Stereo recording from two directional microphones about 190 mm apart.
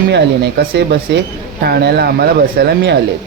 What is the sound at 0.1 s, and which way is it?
Speech, 60° right (ahead or behind).